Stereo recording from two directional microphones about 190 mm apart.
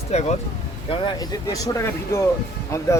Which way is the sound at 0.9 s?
25° left (ahead or behind).